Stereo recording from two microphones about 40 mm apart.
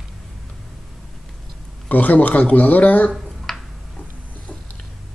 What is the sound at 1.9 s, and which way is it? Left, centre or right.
Speech, left.